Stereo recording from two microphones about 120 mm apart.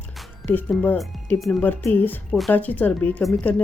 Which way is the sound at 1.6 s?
15° left (ahead or behind).